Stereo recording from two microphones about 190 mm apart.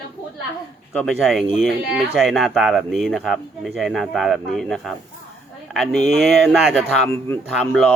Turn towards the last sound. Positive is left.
turn(degrees=0)  # may be behind; listen again after turning